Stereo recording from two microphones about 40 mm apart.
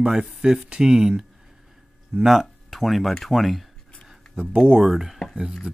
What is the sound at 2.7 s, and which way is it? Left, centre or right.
Speech, centre.